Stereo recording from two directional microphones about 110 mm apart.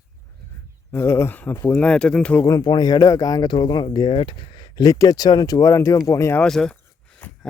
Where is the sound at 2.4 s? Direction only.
35° left (ahead or behind).